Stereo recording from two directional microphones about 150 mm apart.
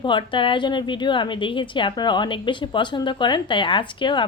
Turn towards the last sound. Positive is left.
turn(degrees=30)  # may be behind; listen again after turning